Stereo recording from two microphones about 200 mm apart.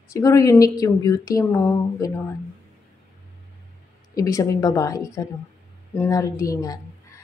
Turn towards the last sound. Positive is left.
turn(degrees=15)  # may be behind; listen again after turning